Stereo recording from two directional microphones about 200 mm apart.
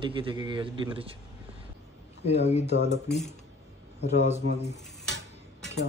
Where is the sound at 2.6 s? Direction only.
30° right (ahead or behind).